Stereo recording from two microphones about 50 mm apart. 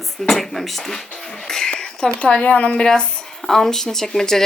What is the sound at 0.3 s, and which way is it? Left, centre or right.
Speech, centre.